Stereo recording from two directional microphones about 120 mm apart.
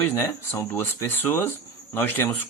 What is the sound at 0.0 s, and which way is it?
Speech, 20° left (ahead or behind).